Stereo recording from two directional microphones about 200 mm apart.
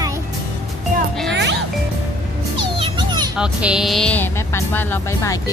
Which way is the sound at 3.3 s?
5° right (ahead or behind).